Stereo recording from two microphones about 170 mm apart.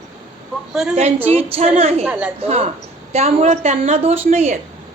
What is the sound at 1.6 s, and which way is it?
Speech, 35° right (ahead or behind).